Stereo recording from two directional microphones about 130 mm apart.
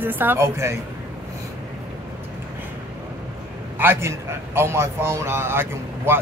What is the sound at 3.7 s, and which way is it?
A man's voice, 15° right (ahead or behind).